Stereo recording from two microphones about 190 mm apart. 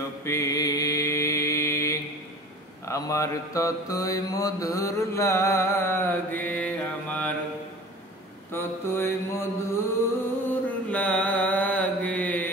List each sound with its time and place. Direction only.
0.2 s mantra: 15° left (ahead or behind)
8.5 s mantra: 10° left (ahead or behind)